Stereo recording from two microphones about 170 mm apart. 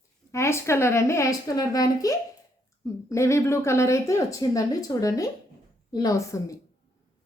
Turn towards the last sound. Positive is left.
turn(degrees=20)  # may be behind; listen again after turning